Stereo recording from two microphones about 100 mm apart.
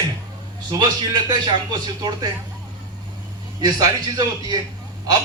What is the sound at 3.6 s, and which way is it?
Speech, 40° right (ahead or behind).